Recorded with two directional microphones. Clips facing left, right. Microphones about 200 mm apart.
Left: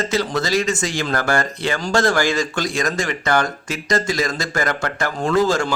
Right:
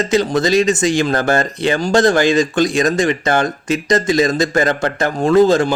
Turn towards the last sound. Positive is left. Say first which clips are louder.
# right 7 dB
turn(degrees=-20)  # may be behind; listen again after turning